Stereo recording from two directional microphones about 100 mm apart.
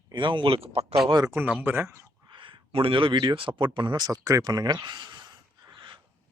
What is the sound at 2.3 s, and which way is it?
A man's voice, 55° right (ahead or behind).